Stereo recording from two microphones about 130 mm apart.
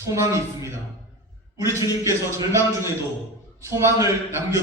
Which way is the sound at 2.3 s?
20° right (ahead or behind).